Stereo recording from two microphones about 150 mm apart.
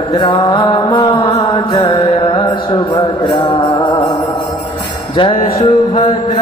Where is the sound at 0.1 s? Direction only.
30° left (ahead or behind).